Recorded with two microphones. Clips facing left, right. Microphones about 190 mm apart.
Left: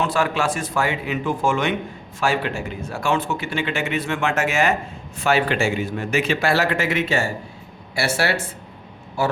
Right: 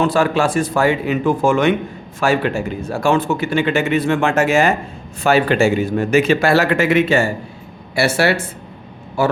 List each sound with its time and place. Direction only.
0.0 s a man's voice: 35° right (ahead or behind); by 8.4 s 60° right (ahead or behind)